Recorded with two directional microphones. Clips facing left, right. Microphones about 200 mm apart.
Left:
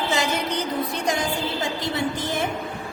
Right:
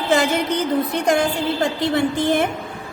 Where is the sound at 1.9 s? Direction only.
60° right (ahead or behind).